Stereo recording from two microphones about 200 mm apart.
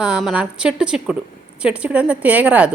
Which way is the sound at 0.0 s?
5° right (ahead or behind).